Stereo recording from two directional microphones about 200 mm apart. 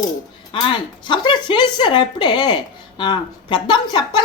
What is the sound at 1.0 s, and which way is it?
Speech, 25° left (ahead or behind).